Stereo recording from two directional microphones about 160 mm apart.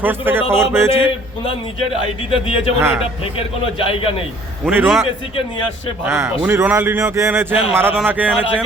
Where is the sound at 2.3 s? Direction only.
35° left (ahead or behind).